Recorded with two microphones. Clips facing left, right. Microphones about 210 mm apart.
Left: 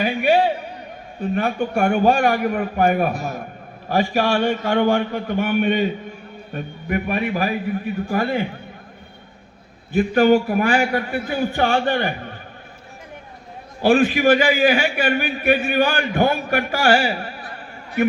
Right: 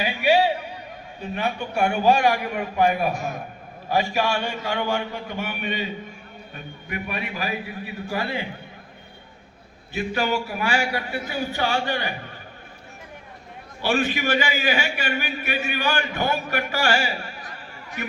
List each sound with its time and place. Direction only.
0.0 s a sound: 50° left (ahead or behind)
1.2 s a man's voice: 50° left (ahead or behind)
3.8 s a man's voice: 50° left (ahead or behind)
9.9 s a man's voice: 50° left (ahead or behind)
13.8 s a man's voice: 55° left (ahead or behind)